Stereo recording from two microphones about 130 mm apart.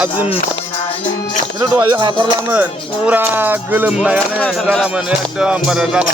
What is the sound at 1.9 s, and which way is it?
Speech, 35° right (ahead or behind).